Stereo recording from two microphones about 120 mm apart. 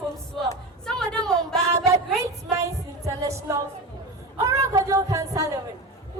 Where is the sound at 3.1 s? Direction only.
25° right (ahead or behind).